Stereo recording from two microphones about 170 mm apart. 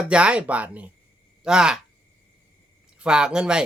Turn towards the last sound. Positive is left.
turn(degrees=-5)  # may be behind; listen again after turning